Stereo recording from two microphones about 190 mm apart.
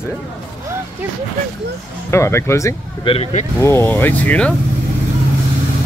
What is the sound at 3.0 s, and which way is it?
Speech, 30° left (ahead or behind).